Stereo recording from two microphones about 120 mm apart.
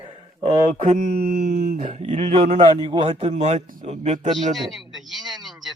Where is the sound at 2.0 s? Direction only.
70° right (ahead or behind).